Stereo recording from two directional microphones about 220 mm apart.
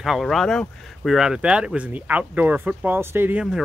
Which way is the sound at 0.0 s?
Centre (ahead or behind).